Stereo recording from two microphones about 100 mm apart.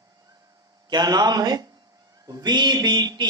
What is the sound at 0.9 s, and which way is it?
A man's voice, 40° right (ahead or behind).